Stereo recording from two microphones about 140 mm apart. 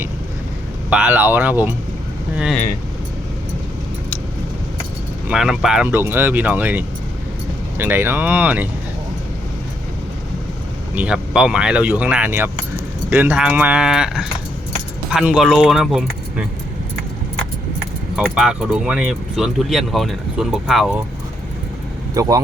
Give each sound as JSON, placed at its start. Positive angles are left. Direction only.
{"t": 0.9, "sound": "speech", "side_deg": -10}
{"t": 5.3, "sound": "speech", "side_deg": -5}
{"t": 10.9, "sound": "speech", "side_deg": -10}
{"t": 18.2, "sound": "speech", "side_deg": -5}
{"t": 22.1, "sound": "speech", "side_deg": -25}